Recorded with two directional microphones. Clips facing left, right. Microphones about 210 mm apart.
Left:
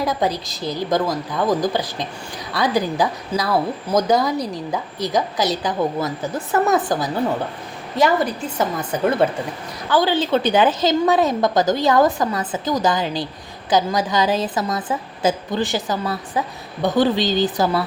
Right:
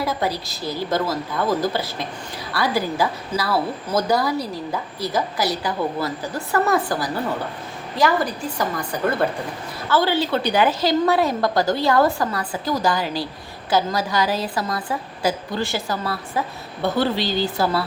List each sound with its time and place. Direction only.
0.0 s a woman's voice: 15° left (ahead or behind)
8.5 s a woman's voice: 20° left (ahead or behind)